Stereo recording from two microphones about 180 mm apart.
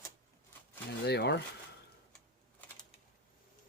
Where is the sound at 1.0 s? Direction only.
70° left (ahead or behind).